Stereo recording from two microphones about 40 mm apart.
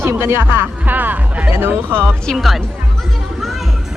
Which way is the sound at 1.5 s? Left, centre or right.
Right.